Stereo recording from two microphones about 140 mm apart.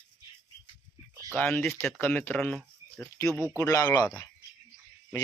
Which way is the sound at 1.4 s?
10° left (ahead or behind).